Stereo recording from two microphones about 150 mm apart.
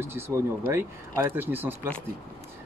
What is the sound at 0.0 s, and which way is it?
Speech, 15° right (ahead or behind).